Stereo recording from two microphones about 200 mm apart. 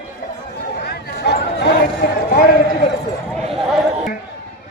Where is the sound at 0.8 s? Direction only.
55° left (ahead or behind).